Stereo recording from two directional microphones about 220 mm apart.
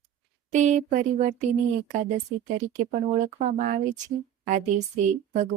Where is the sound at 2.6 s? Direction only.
35° right (ahead or behind).